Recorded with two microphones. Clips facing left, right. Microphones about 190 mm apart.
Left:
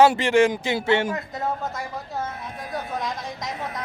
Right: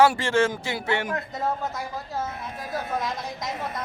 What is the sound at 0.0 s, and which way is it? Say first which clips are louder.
Speech: left 3 dB; 20° left (ahead or behind).